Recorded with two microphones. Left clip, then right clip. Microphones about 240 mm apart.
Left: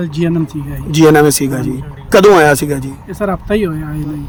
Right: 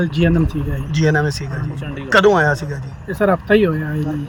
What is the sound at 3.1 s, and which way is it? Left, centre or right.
Speech, centre.